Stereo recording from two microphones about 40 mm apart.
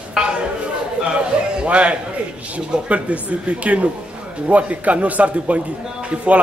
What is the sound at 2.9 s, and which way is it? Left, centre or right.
A man's voice, right.